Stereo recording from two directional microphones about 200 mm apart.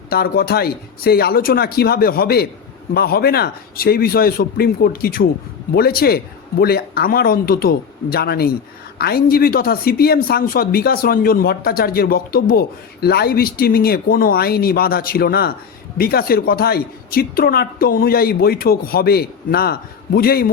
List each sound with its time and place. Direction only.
0.1 s speech: 50° left (ahead or behind)